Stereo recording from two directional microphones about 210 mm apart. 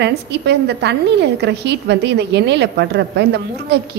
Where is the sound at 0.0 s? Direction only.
55° right (ahead or behind).